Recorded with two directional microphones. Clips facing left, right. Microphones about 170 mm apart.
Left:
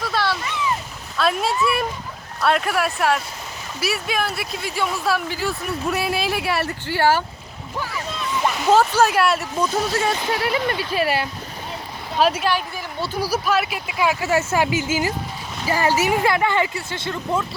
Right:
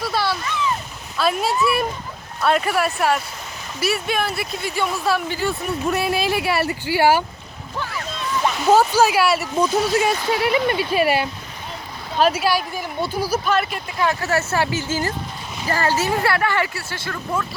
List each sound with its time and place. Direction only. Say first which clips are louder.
0.1 s a sound: left 1 dB; 5° right (ahead or behind)
1.1 s speech: right 1 dB; centre (ahead or behind)
8.4 s speech: right 1 dB; centre (ahead or behind)
13.3 s speech: left 1 dB; 5° left (ahead or behind); by 17.4 s 20° left (ahead or behind)